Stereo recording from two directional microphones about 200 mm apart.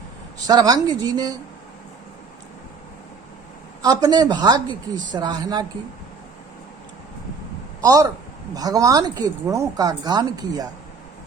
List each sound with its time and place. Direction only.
0.3 s speech: 20° right (ahead or behind)
3.8 s speech: 20° right (ahead or behind)
8.5 s speech: 20° right (ahead or behind)